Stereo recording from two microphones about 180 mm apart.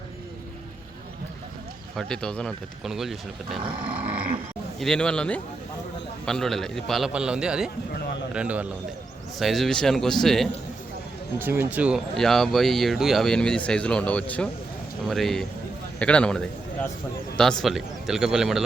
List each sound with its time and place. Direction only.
2.0 s speech: 5° left (ahead or behind)
3.6 s roaring cats: 25° right (ahead or behind)
3.8 s roaring cats: 10° right (ahead or behind)
4.8 s a man's voice: 5° left (ahead or behind)
11.3 s a man's voice: 10° right (ahead or behind)